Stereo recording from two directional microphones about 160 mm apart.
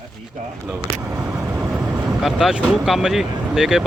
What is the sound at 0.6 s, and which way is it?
Speech, 10° right (ahead or behind).